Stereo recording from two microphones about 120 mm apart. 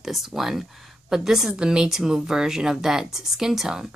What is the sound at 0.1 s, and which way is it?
Speech, centre (ahead or behind).